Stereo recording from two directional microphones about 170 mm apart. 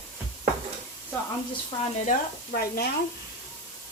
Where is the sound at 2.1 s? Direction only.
65° left (ahead or behind).